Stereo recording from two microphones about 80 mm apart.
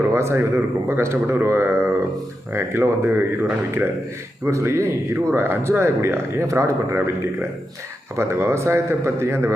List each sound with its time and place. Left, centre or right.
0.1 s a man's voice: right
4.4 s a man's voice: right
8.1 s a man's voice: right